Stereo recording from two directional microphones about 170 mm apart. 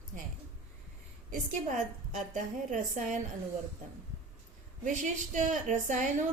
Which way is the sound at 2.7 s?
50° right (ahead or behind).